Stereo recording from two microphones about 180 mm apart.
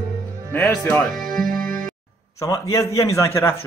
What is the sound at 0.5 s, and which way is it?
Speech, 10° left (ahead or behind).